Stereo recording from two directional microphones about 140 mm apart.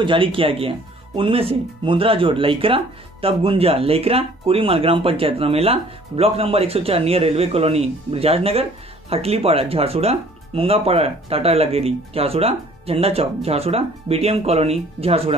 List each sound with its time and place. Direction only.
0.0 s speech: 40° right (ahead or behind)